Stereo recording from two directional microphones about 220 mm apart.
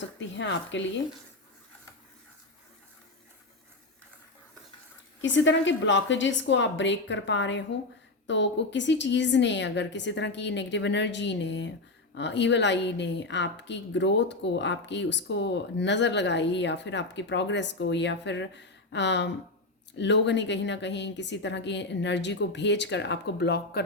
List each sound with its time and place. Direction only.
0.0 s a woman's voice: 55° left (ahead or behind)
5.2 s a woman's voice: 55° left (ahead or behind)